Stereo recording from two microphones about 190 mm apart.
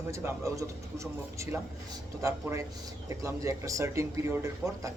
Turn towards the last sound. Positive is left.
turn(degrees=-15)  # may be behind; listen again after turning